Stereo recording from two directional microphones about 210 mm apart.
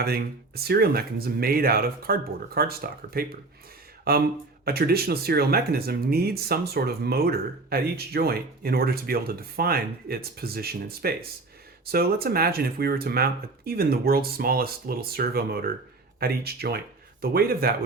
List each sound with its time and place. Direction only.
0.0 s speech: 50° right (ahead or behind)